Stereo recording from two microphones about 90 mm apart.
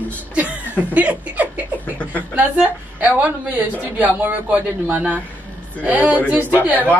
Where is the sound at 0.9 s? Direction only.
15° right (ahead or behind).